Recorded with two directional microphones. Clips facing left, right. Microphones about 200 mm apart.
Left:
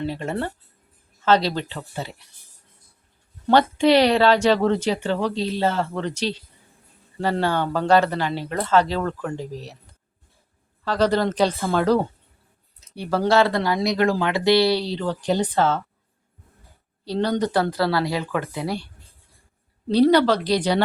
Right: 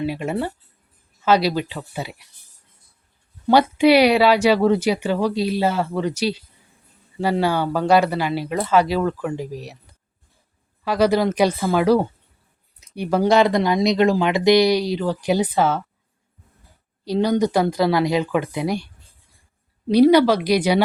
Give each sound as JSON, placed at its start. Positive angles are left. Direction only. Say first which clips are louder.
{"t": 0.0, "sound": "speech", "louder": "right 3 dB", "side_deg": -10}
{"t": 3.4, "sound": "speech", "louder": "right 2 dB", "side_deg": -10}
{"t": 10.8, "sound": "speech", "louder": "right 2 dB", "side_deg": -10}
{"t": 17.1, "sound": "speech", "louder": "right 4 dB", "side_deg": -10}
{"t": 19.9, "sound": "speech", "louder": "right 3 dB", "side_deg": -10}